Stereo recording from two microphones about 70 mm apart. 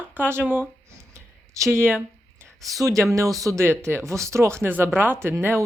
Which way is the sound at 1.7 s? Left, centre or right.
Right.